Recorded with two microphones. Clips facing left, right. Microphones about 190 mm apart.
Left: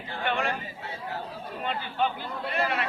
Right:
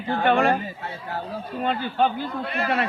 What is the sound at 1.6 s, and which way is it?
Speech, 35° right (ahead or behind).